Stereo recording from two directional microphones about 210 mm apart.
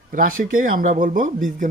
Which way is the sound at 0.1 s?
40° right (ahead or behind).